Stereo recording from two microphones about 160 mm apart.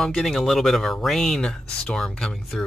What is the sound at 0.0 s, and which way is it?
Speech, 5° left (ahead or behind).